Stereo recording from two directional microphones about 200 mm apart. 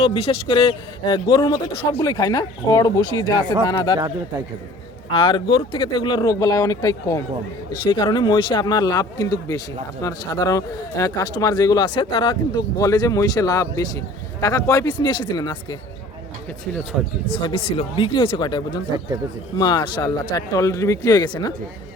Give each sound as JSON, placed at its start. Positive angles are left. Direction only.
{"t": 0.0, "sound": "speech", "side_deg": 30}
{"t": 5.1, "sound": "speech", "side_deg": 25}
{"t": 16.9, "sound": "speech", "side_deg": -5}
{"t": 17.4, "sound": "speech", "side_deg": 30}